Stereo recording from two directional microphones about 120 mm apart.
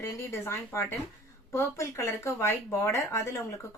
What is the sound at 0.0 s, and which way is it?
Speech, 25° left (ahead or behind).